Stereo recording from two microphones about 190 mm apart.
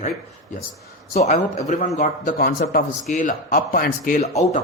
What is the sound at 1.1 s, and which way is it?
Speech, 35° left (ahead or behind).